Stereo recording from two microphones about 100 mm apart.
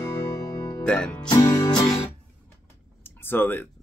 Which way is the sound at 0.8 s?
10° left (ahead or behind).